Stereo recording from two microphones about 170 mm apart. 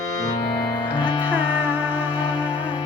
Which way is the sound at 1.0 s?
25° left (ahead or behind).